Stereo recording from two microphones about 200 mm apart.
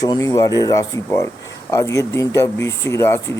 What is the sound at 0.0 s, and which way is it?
Speech, 15° left (ahead or behind).